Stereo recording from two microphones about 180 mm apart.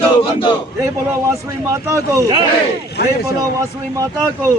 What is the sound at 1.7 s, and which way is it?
Speech, 15° right (ahead or behind).